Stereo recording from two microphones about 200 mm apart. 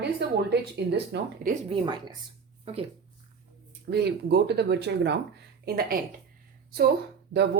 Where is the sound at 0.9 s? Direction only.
55° right (ahead or behind).